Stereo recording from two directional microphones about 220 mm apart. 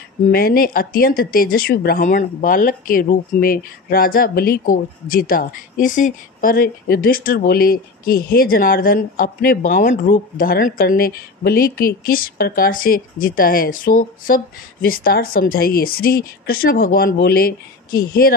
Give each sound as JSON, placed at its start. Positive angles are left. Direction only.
{"t": 0.3, "sound": "speech", "side_deg": 40}